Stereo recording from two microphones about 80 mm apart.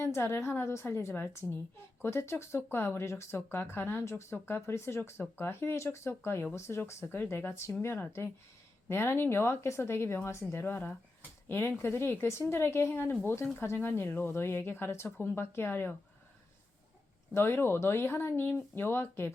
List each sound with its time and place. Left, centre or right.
0.0 s speech: left
17.3 s speech: left